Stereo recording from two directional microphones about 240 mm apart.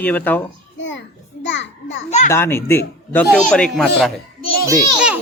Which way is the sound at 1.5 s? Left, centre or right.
Left.